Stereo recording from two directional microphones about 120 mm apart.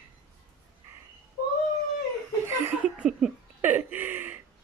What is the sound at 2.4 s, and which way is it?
Chuckle, 15° right (ahead or behind).